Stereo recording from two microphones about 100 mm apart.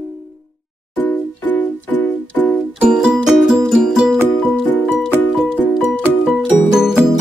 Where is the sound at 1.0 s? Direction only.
15° left (ahead or behind).